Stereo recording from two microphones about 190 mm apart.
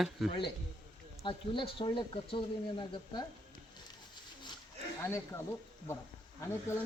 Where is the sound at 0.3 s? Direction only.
25° left (ahead or behind).